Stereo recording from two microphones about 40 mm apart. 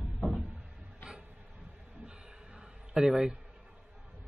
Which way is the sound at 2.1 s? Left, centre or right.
Centre.